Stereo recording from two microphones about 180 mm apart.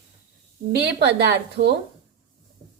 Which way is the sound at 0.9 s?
65° right (ahead or behind).